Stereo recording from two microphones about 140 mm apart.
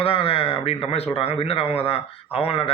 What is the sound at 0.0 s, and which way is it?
A man's voice, 40° left (ahead or behind).